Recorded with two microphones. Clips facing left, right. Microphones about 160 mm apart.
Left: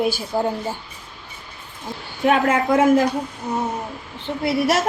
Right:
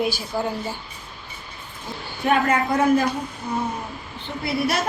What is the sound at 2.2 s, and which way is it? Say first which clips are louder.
Speech: left 3 dB; 90° left.